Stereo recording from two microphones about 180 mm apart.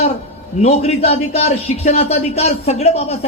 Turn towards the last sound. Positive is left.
turn(degrees=35)  # may be behind; listen again after turning